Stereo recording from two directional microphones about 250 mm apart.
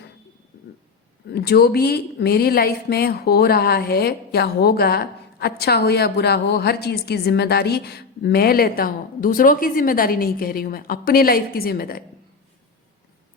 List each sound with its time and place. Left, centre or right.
1.3 s a woman's voice: left